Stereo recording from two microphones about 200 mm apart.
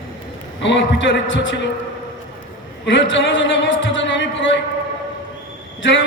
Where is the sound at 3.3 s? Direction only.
70° left (ahead or behind).